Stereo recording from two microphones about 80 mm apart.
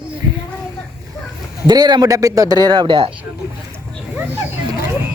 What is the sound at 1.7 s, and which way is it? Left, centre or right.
Speech, right.